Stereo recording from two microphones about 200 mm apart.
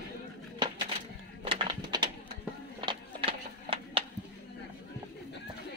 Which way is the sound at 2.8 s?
25° right (ahead or behind).